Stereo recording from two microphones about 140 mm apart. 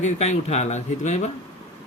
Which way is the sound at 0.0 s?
50° left (ahead or behind).